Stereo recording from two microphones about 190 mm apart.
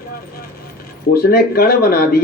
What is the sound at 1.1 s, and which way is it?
Speech, 55° left (ahead or behind).